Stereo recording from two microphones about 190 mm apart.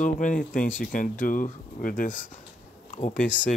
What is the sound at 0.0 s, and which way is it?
Speech, 45° left (ahead or behind).